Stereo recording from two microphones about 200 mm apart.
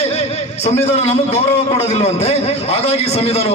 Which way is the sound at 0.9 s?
35° left (ahead or behind).